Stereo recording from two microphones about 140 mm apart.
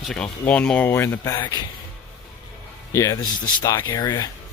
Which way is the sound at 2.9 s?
25° left (ahead or behind).